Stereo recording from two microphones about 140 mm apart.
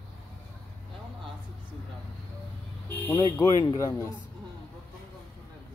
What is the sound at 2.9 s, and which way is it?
Vehicle, 15° left (ahead or behind).